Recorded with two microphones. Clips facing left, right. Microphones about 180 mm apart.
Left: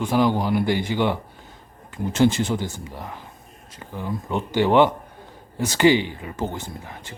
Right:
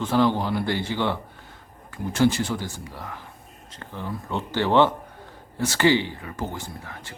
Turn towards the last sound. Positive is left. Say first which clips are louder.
# left 2 dB
turn(degrees=20)  # may be behind; listen again after turning